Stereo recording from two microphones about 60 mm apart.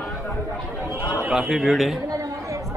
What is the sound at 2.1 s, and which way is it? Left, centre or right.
Chatter, right.